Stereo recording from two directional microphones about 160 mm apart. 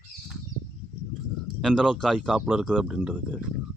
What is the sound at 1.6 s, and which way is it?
A man's voice, centre (ahead or behind).